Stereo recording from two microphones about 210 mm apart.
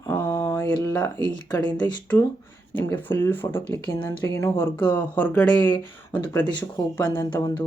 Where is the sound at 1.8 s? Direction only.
20° left (ahead or behind).